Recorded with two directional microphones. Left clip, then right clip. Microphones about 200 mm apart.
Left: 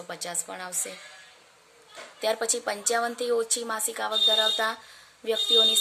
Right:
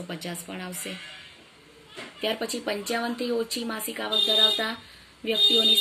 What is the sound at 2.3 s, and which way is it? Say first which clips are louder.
Speech: left 1 dB; 60° left (ahead or behind).